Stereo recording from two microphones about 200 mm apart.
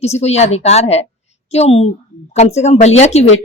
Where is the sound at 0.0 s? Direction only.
30° left (ahead or behind).